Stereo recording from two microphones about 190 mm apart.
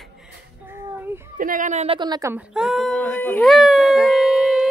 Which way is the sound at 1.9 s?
20° right (ahead or behind).